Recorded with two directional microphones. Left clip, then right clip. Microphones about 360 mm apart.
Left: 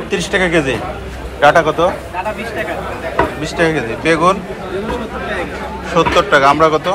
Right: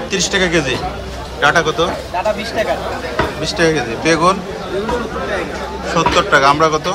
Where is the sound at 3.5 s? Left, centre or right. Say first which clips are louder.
Right 1 dB; right.